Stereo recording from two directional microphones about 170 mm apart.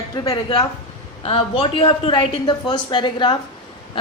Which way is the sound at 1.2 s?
35° left (ahead or behind).